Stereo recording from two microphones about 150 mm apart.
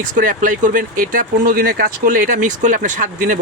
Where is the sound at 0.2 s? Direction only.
60° right (ahead or behind).